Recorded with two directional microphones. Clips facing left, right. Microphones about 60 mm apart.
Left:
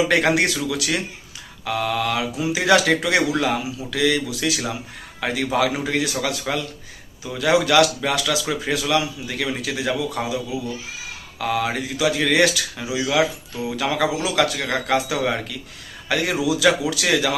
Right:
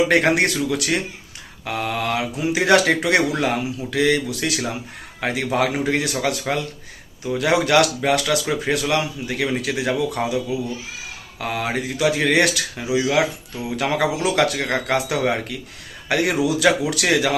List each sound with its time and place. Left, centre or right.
0.3 s speech: right
11.3 s speech: right